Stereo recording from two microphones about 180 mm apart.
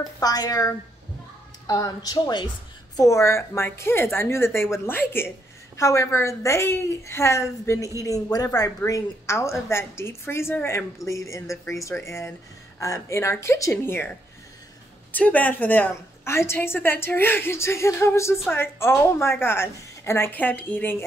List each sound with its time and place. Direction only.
0.2 s a woman's voice: 20° left (ahead or behind)
15.1 s a woman's voice: 10° left (ahead or behind)